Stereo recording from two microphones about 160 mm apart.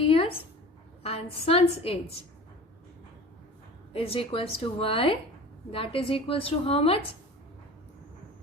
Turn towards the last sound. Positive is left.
turn(degrees=35)  # may be behind; listen again after turning